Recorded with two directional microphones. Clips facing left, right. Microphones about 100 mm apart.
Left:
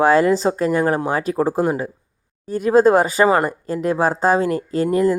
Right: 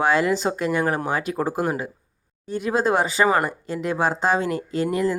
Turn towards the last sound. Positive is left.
turn(degrees=35)  # may be behind; listen again after turning